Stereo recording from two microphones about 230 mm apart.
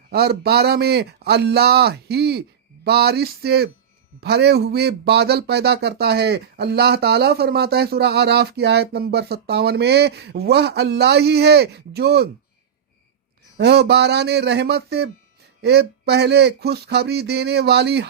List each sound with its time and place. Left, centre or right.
0.1 s speech: right
13.6 s speech: right